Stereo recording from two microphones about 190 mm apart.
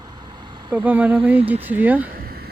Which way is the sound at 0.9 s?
10° right (ahead or behind).